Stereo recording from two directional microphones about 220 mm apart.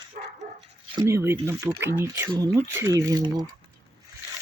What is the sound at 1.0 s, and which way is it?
Speech, 10° right (ahead or behind).